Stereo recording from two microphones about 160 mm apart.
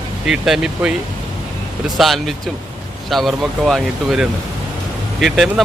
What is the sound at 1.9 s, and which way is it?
Speech, centre (ahead or behind).